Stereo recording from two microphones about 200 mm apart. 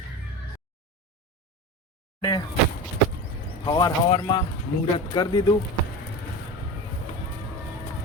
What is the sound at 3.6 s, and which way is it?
Speech, 20° left (ahead or behind).